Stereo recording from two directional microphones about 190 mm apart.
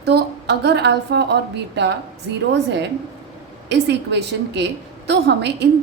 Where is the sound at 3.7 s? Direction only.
65° right (ahead or behind).